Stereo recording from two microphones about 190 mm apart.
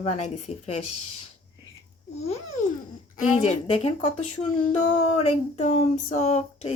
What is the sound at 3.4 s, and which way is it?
Speech, 35° left (ahead or behind).